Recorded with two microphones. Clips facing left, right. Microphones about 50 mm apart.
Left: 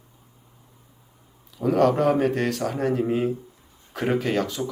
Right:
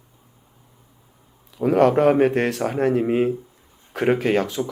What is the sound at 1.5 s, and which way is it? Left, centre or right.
A man's voice, right.